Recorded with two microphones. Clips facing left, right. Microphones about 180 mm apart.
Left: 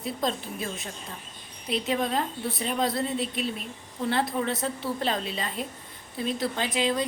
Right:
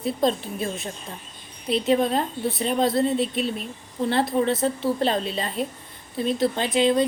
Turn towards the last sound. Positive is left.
turn(degrees=-25)  # may be behind; listen again after turning